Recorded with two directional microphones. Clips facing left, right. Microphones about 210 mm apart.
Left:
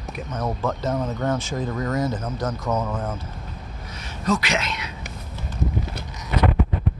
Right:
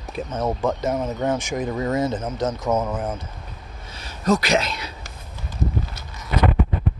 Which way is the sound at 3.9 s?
35° right (ahead or behind).